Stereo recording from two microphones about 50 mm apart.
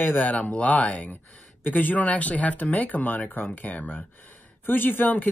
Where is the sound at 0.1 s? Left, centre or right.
Left.